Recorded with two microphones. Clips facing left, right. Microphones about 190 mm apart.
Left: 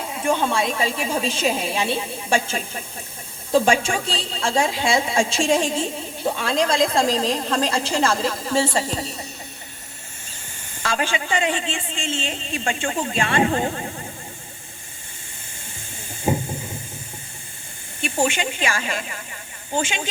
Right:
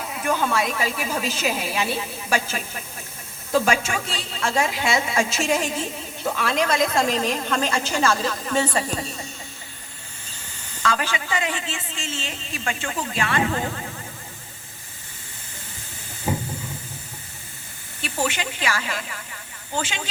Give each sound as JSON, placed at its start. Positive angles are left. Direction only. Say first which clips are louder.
{"t": 0.0, "sound": "a woman's voice", "louder": "left 2 dB", "side_deg": 30}
{"t": 10.8, "sound": "a woman's voice", "louder": "left 1 dB", "side_deg": 25}
{"t": 16.2, "sound": "train", "louder": "left 4 dB", "side_deg": 25}
{"t": 18.0, "sound": "a woman's voice", "louder": "left 4 dB", "side_deg": 25}